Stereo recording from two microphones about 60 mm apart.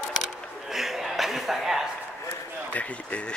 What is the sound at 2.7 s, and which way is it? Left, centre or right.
Speech, left.